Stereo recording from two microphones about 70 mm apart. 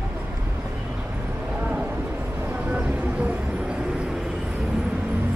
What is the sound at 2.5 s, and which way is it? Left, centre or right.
Vehicle, centre.